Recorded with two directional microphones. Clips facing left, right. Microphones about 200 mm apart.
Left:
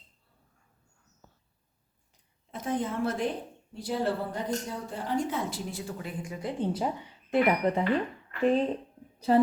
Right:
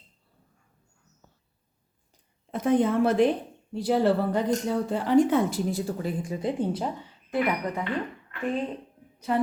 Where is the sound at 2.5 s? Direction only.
65° right (ahead or behind).